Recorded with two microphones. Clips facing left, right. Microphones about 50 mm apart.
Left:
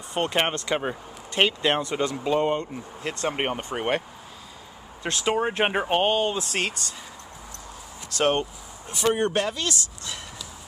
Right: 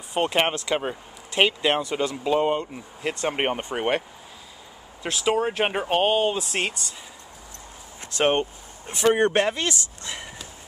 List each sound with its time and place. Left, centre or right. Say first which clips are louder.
0.1 s speech: right 2 dB; centre
5.0 s speech: right 1 dB; centre
6.0 s speech: right 2 dB; centre
8.1 s a sound: right 1 dB; right
9.1 s speech: right 4 dB; right